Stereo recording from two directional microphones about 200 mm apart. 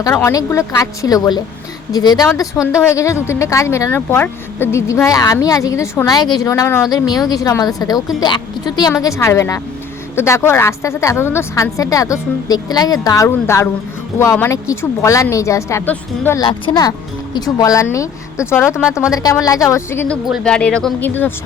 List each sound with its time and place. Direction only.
0.0 s speech: 15° left (ahead or behind)
16.5 s speech: 20° left (ahead or behind)
20.2 s speech: centre (ahead or behind)